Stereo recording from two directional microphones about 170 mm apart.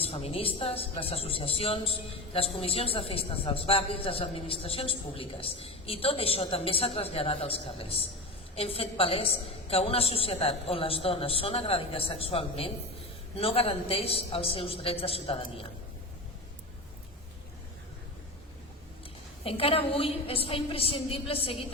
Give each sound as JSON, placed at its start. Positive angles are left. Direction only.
{"t": 0.0, "sound": "a man's voice", "side_deg": 35}
{"t": 19.5, "sound": "a man's voice", "side_deg": 35}